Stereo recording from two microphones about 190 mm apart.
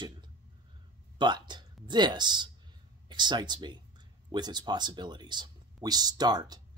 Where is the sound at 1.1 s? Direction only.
25° right (ahead or behind).